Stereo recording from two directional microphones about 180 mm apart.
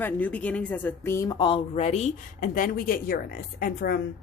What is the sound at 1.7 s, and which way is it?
Speech, 35° left (ahead or behind).